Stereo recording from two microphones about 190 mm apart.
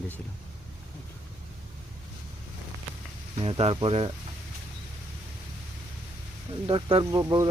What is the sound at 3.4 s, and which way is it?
Speech, 30° right (ahead or behind).